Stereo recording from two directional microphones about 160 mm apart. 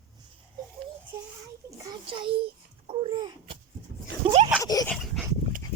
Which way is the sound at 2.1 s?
35° right (ahead or behind).